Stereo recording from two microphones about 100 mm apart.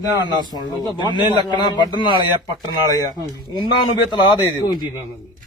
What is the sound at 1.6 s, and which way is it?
Speech, 50° left (ahead or behind).